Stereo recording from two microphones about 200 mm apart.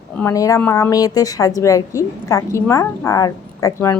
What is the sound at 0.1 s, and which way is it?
A woman's voice, 10° left (ahead or behind).